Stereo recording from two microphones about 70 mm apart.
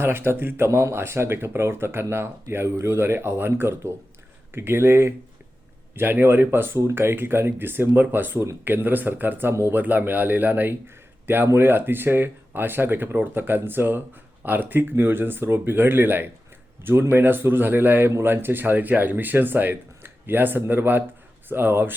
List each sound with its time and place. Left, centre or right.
0.0 s speech: right